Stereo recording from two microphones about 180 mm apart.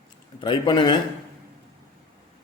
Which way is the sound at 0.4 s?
25° left (ahead or behind).